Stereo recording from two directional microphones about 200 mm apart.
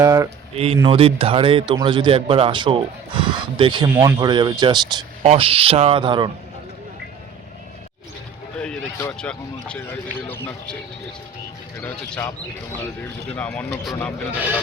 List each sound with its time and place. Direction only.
0.0 s speech: 15° right (ahead or behind)
0.5 s speech: 30° right (ahead or behind)
8.5 s a sound: 5° left (ahead or behind)
9.1 s speech: 5° left (ahead or behind)
11.8 s speech: 5° left (ahead or behind)
13.3 s speech: 5° left (ahead or behind)